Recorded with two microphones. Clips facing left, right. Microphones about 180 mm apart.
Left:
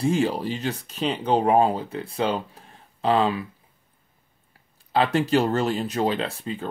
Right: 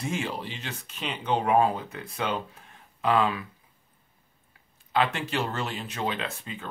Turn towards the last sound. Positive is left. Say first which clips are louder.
# left 7 dB
turn(degrees=35)  # may be behind; listen again after turning